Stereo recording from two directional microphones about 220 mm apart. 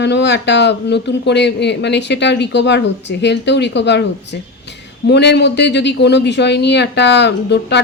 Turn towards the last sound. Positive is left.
turn(degrees=50)  # may be behind; listen again after turning